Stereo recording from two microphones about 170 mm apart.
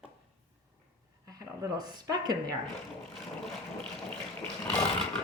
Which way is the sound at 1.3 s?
20° right (ahead or behind).